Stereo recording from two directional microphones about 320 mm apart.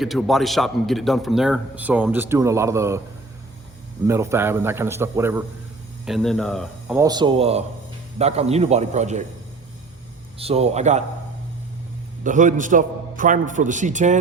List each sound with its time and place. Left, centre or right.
0.0 s a man's voice: centre
4.0 s a man's voice: centre
10.3 s a man's voice: centre
12.2 s a man's voice: right